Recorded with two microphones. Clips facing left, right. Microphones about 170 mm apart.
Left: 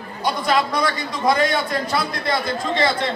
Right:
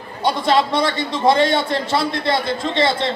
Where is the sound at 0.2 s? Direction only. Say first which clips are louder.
Right 3 dB; 25° right (ahead or behind).